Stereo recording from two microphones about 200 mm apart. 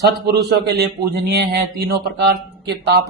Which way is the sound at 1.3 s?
50° right (ahead or behind).